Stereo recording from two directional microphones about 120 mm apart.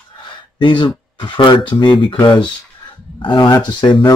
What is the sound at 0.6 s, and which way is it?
Speech, 45° left (ahead or behind).